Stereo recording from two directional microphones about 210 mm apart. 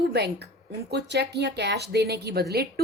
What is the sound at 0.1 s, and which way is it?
Speech, 50° right (ahead or behind).